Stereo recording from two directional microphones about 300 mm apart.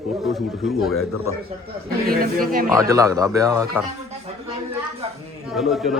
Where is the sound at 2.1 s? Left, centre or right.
Right.